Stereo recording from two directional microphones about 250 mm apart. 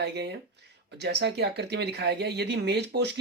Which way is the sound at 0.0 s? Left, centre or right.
Right.